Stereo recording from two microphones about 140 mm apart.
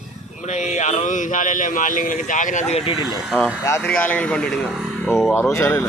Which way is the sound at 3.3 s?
10° left (ahead or behind).